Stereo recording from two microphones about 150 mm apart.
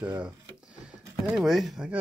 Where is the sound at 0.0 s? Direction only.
10° right (ahead or behind).